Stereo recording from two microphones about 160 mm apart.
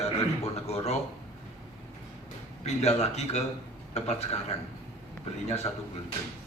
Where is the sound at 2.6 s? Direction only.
40° left (ahead or behind).